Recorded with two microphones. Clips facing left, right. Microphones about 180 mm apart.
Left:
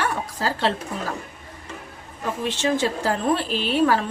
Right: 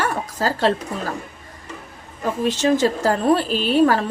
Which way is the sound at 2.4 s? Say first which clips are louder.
Right 5 dB; 40° right (ahead or behind).